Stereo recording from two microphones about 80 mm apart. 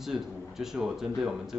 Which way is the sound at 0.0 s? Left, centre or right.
Centre.